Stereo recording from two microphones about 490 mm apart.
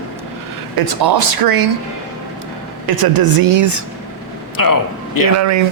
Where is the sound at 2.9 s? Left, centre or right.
Right.